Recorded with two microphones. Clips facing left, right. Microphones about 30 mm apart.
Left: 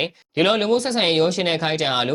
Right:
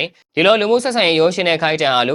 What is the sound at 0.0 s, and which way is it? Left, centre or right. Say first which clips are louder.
Speech: right 5 dB; centre.